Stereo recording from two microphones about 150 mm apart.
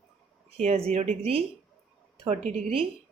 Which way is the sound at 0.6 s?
45° right (ahead or behind).